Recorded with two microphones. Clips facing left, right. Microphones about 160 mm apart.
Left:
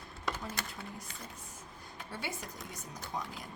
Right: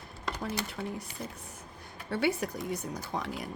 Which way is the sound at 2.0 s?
70° right (ahead or behind).